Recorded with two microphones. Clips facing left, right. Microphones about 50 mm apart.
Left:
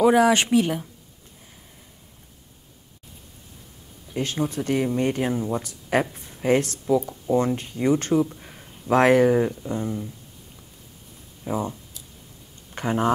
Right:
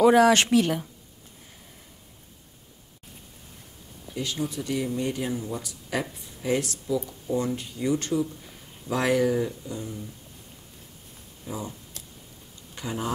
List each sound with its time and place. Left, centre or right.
0.0 s speech: centre
4.1 s speech: left
11.4 s speech: left
12.7 s speech: left